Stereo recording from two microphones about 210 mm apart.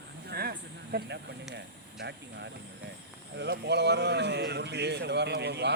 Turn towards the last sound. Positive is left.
turn(degrees=-55)  # may be behind; listen again after turning